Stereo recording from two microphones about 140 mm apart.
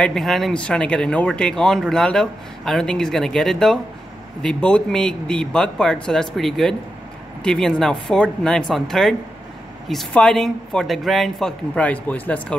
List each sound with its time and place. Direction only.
0.0 s speech: centre (ahead or behind)